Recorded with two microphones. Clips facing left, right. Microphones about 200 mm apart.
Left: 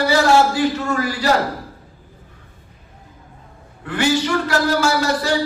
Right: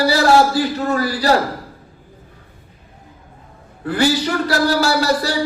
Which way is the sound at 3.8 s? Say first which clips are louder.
Right 1 dB; 35° right (ahead or behind).